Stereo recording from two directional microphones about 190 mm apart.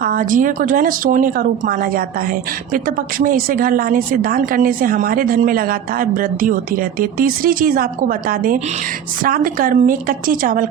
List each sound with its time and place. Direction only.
0.0 s a woman's voice: 45° right (ahead or behind)